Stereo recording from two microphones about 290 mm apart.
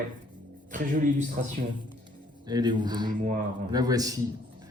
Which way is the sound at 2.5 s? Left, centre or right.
Centre.